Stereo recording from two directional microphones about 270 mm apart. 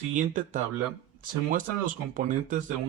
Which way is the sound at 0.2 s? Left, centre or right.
Right.